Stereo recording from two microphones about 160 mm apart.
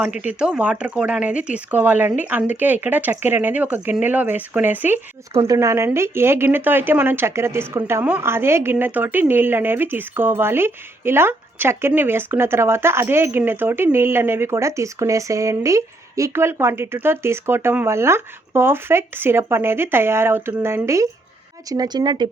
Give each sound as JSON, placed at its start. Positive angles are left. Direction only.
{"t": 0.2, "sound": "a woman's voice", "side_deg": -10}